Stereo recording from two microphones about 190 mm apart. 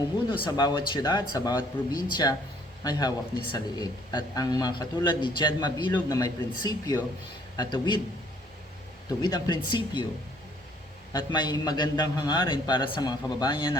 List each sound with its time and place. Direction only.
0.4 s a man's voice: 20° left (ahead or behind)
9.0 s a man's voice: 20° left (ahead or behind)
11.1 s a man's voice: 25° left (ahead or behind)